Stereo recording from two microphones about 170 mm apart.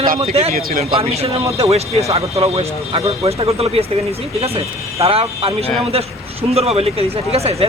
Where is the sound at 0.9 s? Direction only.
35° right (ahead or behind).